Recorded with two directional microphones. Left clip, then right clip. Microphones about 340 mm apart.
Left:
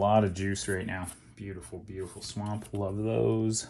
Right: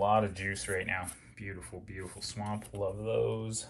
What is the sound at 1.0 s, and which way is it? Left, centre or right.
Speech, centre.